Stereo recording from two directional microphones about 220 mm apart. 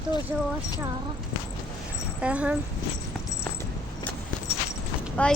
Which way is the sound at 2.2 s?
5° right (ahead or behind).